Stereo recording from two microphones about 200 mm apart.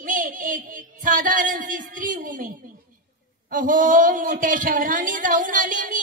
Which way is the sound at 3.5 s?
40° right (ahead or behind).